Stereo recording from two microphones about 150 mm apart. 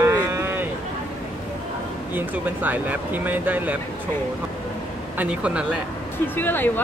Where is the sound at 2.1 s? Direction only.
10° right (ahead or behind).